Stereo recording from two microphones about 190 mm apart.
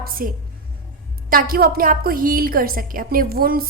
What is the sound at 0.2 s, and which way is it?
A woman's voice, 50° right (ahead or behind).